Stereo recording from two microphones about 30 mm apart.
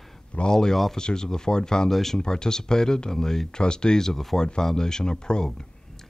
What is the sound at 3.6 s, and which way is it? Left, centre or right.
Speech, left.